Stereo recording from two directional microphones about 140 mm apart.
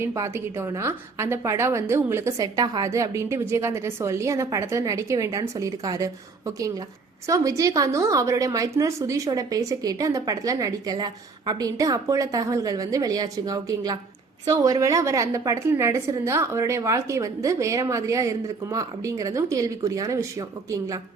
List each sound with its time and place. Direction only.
0.0 s a woman's voice: 20° right (ahead or behind)